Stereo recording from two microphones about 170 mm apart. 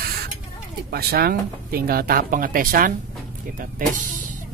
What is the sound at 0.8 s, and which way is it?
Speech, 65° right (ahead or behind).